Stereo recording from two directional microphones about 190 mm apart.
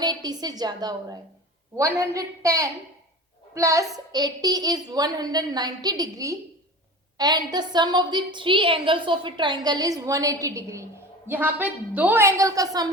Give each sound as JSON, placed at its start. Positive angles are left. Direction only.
{"t": 0.0, "sound": "a woman's voice", "side_deg": -20}